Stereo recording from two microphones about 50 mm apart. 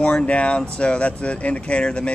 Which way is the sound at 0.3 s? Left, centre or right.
Left.